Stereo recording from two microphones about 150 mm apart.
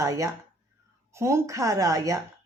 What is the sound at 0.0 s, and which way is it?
Speech, 20° right (ahead or behind).